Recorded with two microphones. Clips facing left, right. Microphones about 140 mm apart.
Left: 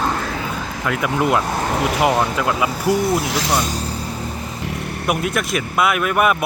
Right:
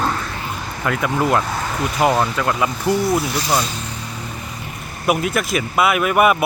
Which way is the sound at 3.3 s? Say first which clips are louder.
Left 1 dB; 90° left.